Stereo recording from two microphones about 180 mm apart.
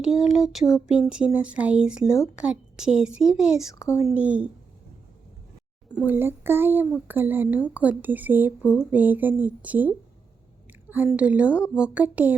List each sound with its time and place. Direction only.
0.0 s a woman's voice: centre (ahead or behind)
3.7 s speech: 15° left (ahead or behind)
4.0 s speech: 5° right (ahead or behind)
6.1 s speech: 10° right (ahead or behind)
10.9 s speech: 10° right (ahead or behind)